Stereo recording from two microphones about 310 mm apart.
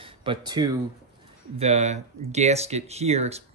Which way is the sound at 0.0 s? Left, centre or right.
Centre.